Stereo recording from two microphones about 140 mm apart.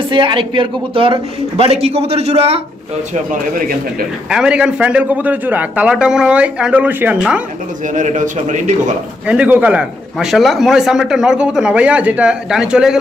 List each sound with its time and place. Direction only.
0.1 s a man's voice: 35° right (ahead or behind)
4.3 s a man's voice: 5° right (ahead or behind)
7.9 s a man's voice: 65° right (ahead or behind)
9.2 s a man's voice: 10° right (ahead or behind)